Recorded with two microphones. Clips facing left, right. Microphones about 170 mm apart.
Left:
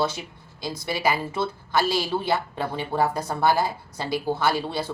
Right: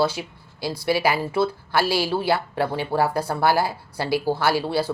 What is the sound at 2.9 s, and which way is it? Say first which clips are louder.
A woman's voice: right 2 dB; 5° right (ahead or behind).